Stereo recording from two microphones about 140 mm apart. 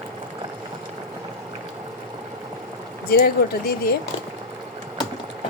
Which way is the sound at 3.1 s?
90° left.